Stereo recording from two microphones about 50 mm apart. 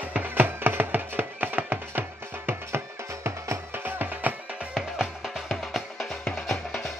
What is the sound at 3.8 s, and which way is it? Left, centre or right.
Music, right.